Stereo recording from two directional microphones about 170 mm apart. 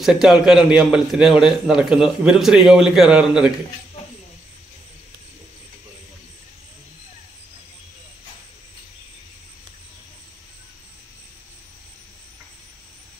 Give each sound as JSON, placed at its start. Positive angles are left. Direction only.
{"t": 0.0, "sound": "a man's voice", "side_deg": -5}